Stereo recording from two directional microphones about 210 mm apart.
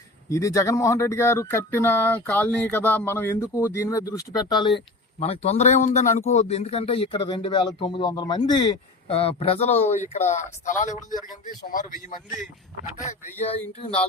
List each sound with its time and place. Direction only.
0.3 s speech: 15° left (ahead or behind); by 12.1 s 40° left (ahead or behind)
13.7 s speech: 25° left (ahead or behind)